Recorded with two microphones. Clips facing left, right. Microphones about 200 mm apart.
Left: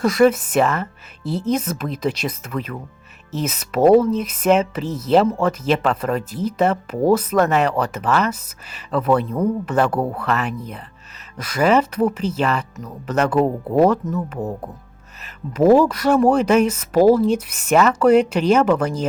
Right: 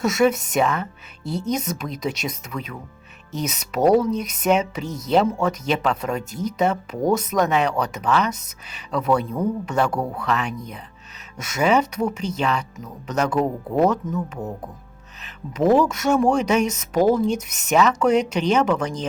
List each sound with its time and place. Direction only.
0.0 s speech: centre (ahead or behind)
14.3 s speech: 30° left (ahead or behind)
15.5 s speech: 5° left (ahead or behind)